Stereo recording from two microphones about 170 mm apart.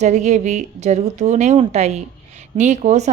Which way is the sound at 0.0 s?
40° right (ahead or behind).